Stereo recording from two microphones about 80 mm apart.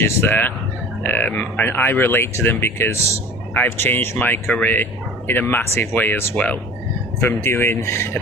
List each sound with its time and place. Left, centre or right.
0.0 s speech: left
7.2 s speech: left